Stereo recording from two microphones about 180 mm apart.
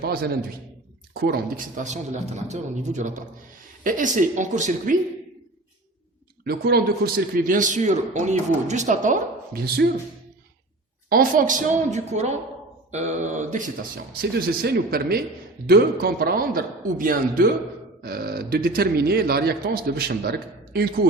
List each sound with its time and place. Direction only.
0.0 s a man's voice: 55° right (ahead or behind)
6.4 s a man's voice: 60° right (ahead or behind); by 9.6 s 45° right (ahead or behind)
9.6 s a man's voice: 65° right (ahead or behind)
11.1 s a man's voice: 50° right (ahead or behind)
14.2 s a man's voice: 55° right (ahead or behind)